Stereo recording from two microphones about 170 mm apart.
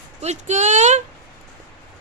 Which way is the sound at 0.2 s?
40° right (ahead or behind).